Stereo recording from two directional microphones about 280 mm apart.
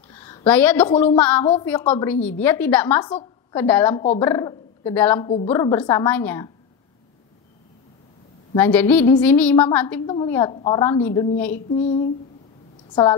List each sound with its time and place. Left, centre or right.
0.1 s a woman's voice: centre
1.4 s child singing: centre
1.7 s a woman's voice: centre
8.5 s a woman's voice: centre
10.8 s a woman's voice: centre
11.1 s child singing: left